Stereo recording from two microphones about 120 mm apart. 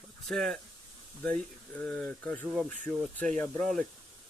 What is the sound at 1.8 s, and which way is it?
Speech, 5° left (ahead or behind).